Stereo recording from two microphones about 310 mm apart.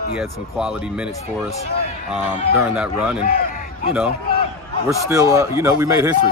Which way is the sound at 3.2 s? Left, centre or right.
Left.